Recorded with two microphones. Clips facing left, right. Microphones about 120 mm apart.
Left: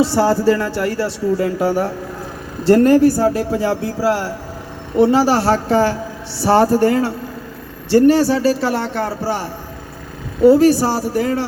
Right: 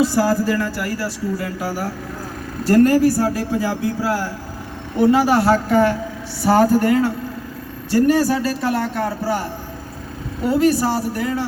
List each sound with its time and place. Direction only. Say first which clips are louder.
0.0 s speech: left 3 dB; 30° left (ahead or behind)